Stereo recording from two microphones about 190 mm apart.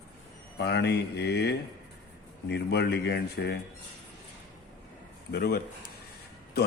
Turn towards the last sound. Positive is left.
turn(degrees=55)  # may be behind; listen again after turning